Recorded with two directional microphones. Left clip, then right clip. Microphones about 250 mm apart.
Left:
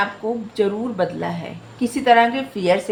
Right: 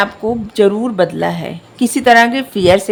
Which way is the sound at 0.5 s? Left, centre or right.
Right.